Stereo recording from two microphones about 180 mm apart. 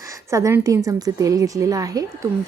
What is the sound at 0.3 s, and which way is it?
A woman's voice, 15° right (ahead or behind).